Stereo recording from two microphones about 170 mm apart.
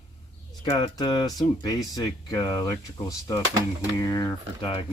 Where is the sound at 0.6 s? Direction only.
25° left (ahead or behind).